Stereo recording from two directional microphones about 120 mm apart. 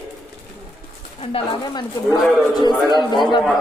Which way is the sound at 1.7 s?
35° left (ahead or behind).